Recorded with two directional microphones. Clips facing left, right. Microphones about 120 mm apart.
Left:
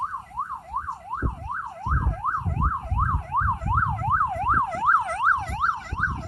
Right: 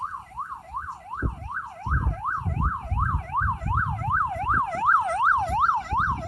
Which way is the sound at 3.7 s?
30° left (ahead or behind).